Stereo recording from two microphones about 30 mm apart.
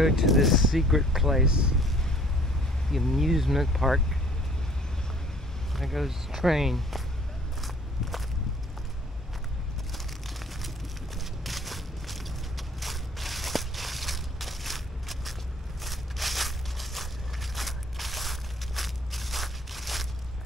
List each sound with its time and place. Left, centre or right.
0.0 s speech: centre
1.4 s speech: right
2.9 s speech: centre
3.2 s speech: centre
5.7 s vehicle: centre
6.0 s speech: centre
7.6 s walk: centre
9.9 s a sound: centre